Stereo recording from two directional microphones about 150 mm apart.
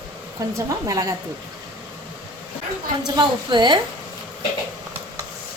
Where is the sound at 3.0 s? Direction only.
30° right (ahead or behind).